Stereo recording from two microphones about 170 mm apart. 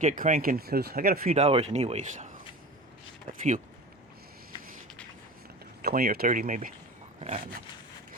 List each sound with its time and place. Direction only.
0.0 s speech: 50° right (ahead or behind)
1.3 s speech: 35° right (ahead or behind)
5.8 s speech: 60° right (ahead or behind)
7.2 s speech: 40° right (ahead or behind)